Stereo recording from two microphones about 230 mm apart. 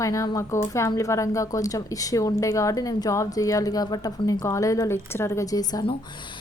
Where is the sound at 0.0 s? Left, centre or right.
Centre.